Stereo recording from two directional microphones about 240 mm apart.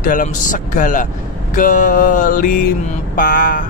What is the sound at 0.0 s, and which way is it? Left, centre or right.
Speech, left.